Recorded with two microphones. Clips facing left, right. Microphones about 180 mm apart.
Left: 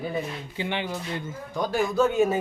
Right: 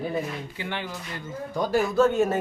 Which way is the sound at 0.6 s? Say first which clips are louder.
Left 7 dB; 20° left (ahead or behind).